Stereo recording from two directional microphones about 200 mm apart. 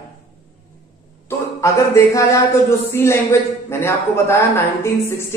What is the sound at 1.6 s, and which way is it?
Speech, 15° left (ahead or behind).